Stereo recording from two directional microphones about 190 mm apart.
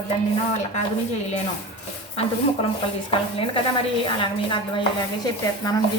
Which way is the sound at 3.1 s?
25° left (ahead or behind).